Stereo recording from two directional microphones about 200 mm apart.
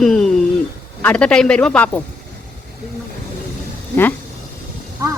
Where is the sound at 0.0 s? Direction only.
Centre (ahead or behind).